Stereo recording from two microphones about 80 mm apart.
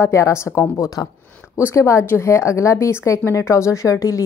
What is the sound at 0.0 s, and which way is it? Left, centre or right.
A woman's voice, left.